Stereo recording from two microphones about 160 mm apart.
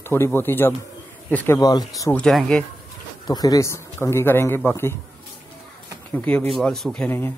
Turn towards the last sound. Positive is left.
turn(degrees=15)  # may be behind; listen again after turning